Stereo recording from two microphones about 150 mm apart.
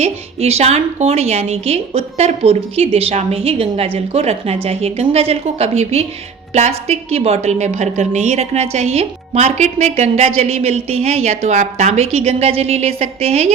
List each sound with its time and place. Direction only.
0.0 s a woman's voice: 45° right (ahead or behind)